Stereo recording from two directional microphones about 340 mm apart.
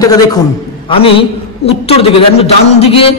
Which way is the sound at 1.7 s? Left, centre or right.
Centre.